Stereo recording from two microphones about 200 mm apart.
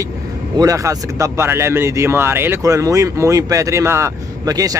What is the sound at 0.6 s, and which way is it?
Speech, 15° right (ahead or behind).